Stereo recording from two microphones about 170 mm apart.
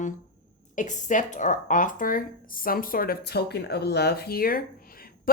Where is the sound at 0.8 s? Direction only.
45° left (ahead or behind).